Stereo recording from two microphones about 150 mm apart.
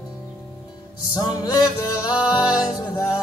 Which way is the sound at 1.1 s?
25° left (ahead or behind).